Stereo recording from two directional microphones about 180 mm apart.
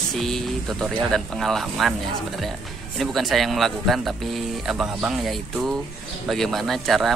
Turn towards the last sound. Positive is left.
turn(degrees=0)  # may be behind; listen again after turning